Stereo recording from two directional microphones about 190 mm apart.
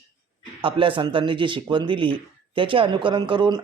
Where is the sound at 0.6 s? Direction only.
25° right (ahead or behind).